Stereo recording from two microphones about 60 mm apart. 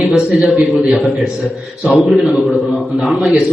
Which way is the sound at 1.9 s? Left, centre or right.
Centre.